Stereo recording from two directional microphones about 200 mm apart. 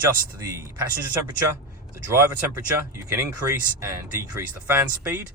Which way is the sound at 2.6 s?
15° right (ahead or behind).